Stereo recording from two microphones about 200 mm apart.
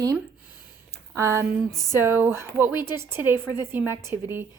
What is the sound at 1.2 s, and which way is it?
A woman's voice, 15° right (ahead or behind).